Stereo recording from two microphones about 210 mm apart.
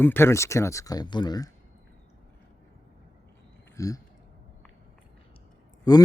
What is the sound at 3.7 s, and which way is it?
Speech, 15° left (ahead or behind).